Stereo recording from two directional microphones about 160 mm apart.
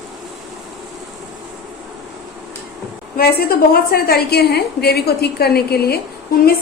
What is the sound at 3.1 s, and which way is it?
A woman's voice, 70° left (ahead or behind).